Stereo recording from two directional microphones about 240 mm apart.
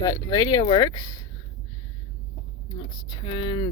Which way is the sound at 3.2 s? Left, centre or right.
Left.